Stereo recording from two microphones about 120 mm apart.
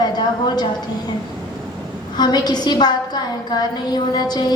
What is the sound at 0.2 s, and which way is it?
Speech, 35° left (ahead or behind).